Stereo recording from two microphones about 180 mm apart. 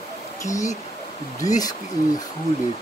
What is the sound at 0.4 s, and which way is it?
Speech, 15° left (ahead or behind).